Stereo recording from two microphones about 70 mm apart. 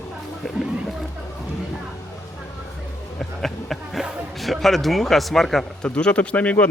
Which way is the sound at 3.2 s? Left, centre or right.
Centre.